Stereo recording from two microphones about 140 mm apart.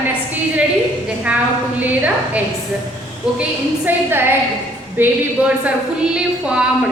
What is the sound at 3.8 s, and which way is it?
A woman's voice, 15° right (ahead or behind).